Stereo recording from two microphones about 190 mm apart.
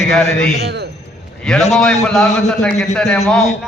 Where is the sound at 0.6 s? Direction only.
60° right (ahead or behind).